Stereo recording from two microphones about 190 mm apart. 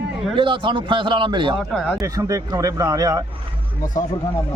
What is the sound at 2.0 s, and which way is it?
A man's voice, 15° right (ahead or behind).